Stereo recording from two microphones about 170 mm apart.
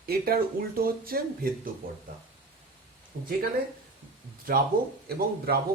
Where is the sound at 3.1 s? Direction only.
65° right (ahead or behind).